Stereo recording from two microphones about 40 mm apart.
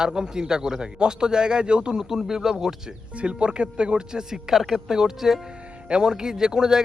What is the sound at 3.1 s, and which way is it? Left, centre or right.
Speech, right.